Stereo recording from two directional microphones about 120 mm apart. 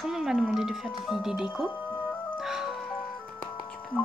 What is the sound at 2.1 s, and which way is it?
Music, 15° left (ahead or behind).